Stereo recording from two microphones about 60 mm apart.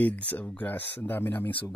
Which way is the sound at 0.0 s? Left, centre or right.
Left.